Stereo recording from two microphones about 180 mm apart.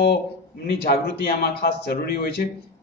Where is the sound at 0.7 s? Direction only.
60° left (ahead or behind).